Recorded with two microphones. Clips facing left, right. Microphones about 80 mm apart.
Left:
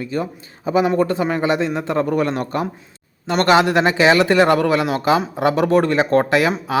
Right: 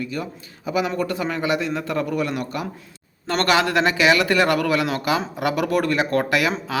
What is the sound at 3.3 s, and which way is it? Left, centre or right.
A man's voice, left.